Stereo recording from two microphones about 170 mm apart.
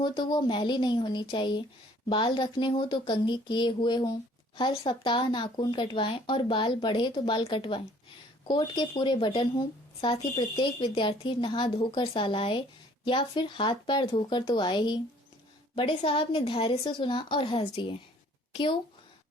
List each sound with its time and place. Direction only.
0.0 s a woman's voice: 25° left (ahead or behind)